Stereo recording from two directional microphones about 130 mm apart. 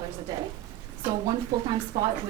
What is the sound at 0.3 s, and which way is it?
Speech, 25° right (ahead or behind).